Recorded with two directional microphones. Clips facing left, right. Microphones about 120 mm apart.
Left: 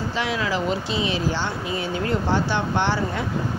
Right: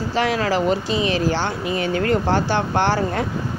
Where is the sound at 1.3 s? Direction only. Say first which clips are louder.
Right 4 dB; 70° right (ahead or behind).